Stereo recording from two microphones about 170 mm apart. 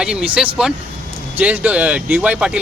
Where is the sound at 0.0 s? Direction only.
5° right (ahead or behind).